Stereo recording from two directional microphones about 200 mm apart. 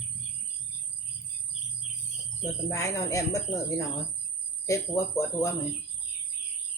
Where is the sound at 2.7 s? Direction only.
15° left (ahead or behind).